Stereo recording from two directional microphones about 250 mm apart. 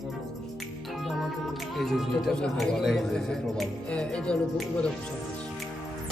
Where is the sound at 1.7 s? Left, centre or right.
Centre.